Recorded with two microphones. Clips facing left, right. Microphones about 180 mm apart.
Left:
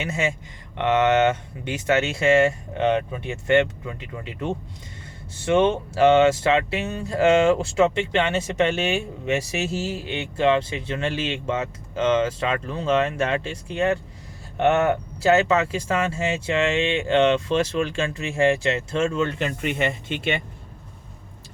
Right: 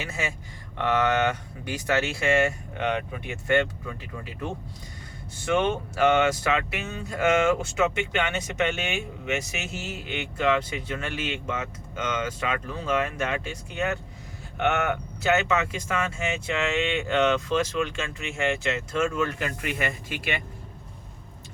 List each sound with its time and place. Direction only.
0.0 s speech: 25° left (ahead or behind)